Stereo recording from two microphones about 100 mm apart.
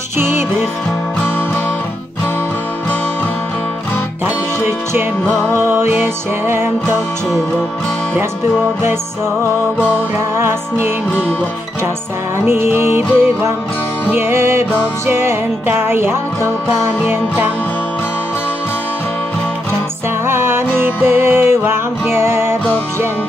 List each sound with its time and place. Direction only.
5.7 s music: 25° right (ahead or behind)
10.3 s music: 25° right (ahead or behind)
12.4 s music: 25° right (ahead or behind)
20.2 s music: 25° right (ahead or behind)